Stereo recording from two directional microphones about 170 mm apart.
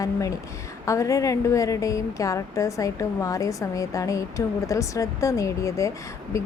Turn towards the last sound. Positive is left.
turn(degrees=20)  # may be behind; listen again after turning